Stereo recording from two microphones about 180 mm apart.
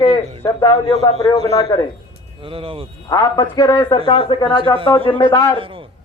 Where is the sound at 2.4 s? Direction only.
30° right (ahead or behind).